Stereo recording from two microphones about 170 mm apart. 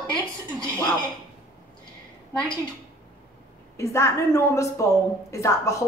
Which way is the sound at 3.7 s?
15° left (ahead or behind).